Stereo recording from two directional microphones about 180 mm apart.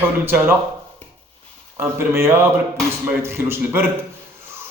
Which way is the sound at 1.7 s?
15° right (ahead or behind).